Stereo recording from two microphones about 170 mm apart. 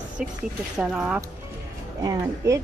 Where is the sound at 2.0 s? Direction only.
20° right (ahead or behind).